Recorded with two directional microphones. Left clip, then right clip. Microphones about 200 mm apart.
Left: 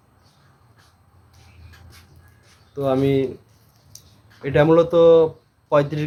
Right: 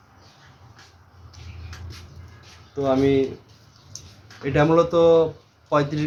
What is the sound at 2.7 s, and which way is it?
Speech, 55° left (ahead or behind).